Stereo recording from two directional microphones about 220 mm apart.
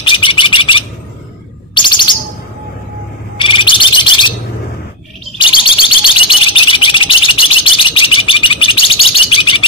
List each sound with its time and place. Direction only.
0.0 s a sound: 20° left (ahead or behind)
1.8 s bird: 20° left (ahead or behind)
3.3 s bird: 20° left (ahead or behind)
5.4 s bird: 25° left (ahead or behind)